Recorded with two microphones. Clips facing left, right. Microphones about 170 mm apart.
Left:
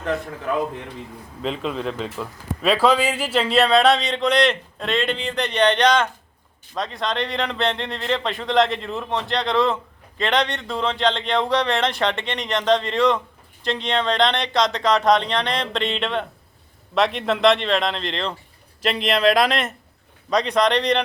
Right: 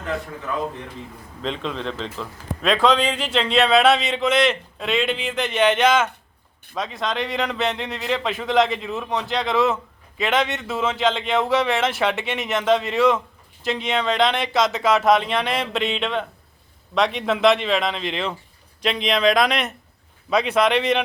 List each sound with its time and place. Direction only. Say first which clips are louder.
1.4 s speech: left 2 dB; 5° left (ahead or behind)